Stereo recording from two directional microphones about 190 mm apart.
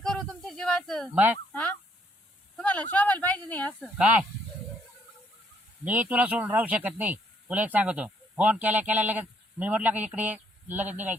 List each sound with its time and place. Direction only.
0.0 s a sound: 5° left (ahead or behind)
1.5 s fowl: 10° left (ahead or behind)
2.6 s a sound: 5° left (ahead or behind)
2.9 s speech: 10° left (ahead or behind)
3.9 s speech: 5° right (ahead or behind)
5.8 s speech: 10° right (ahead or behind)